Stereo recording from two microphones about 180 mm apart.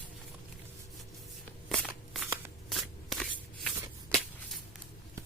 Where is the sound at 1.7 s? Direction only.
5° left (ahead or behind).